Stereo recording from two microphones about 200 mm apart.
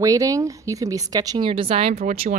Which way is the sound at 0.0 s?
15° right (ahead or behind).